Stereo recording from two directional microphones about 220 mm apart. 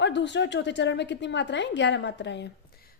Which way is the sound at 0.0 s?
55° left (ahead or behind).